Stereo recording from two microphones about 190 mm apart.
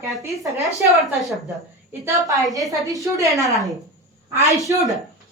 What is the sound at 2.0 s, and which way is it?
A woman's voice, 15° right (ahead or behind).